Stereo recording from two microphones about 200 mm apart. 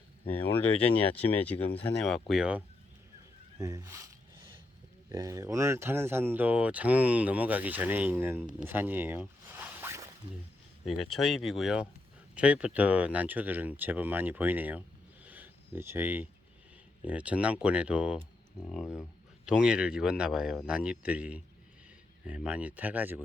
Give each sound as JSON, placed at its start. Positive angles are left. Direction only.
{"t": 0.6, "sound": "speech", "side_deg": 5}
{"t": 1.5, "sound": "speech", "side_deg": 30}
{"t": 2.0, "sound": "a man's voice", "side_deg": 0}
{"t": 3.6, "sound": "speech", "side_deg": -15}
{"t": 5.0, "sound": "speech", "side_deg": -15}
{"t": 8.5, "sound": "zipper", "side_deg": -10}
{"t": 10.8, "sound": "a man's voice", "side_deg": 0}